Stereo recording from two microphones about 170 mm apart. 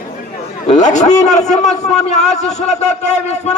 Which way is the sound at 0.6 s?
45° left (ahead or behind).